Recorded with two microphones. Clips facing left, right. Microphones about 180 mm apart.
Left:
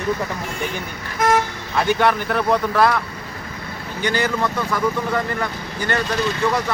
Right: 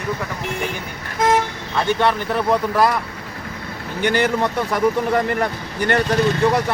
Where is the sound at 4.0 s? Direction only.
60° right (ahead or behind).